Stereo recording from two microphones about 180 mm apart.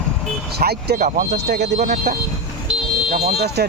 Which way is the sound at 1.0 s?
45° right (ahead or behind).